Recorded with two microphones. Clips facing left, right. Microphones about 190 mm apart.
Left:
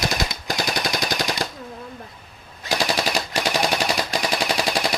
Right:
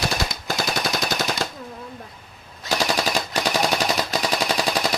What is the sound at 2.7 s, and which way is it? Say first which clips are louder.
Machine gun: even; 15° left (ahead or behind).